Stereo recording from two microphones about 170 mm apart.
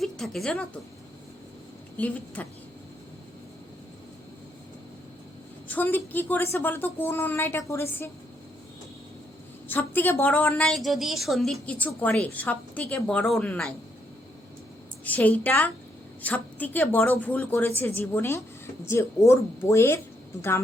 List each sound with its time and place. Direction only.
0.0 s a woman's voice: centre (ahead or behind)
2.0 s a woman's voice: 10° left (ahead or behind)
5.6 s a woman's voice: 10° left (ahead or behind)
9.6 s a woman's voice: 10° left (ahead or behind)
15.0 s a woman's voice: 10° left (ahead or behind)